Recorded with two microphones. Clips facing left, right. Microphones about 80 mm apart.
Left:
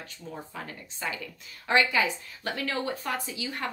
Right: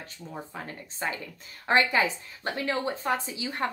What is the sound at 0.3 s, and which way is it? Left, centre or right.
A woman's voice, right.